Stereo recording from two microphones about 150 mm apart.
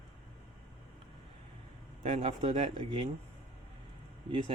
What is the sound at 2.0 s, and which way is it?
Speech, 50° right (ahead or behind).